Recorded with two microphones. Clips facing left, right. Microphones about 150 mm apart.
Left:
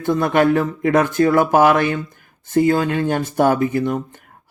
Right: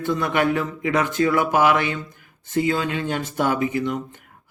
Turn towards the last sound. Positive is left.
turn(degrees=40)  # may be behind; listen again after turning